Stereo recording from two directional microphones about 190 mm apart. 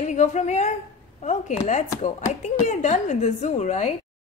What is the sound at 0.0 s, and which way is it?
A woman's voice, 40° left (ahead or behind).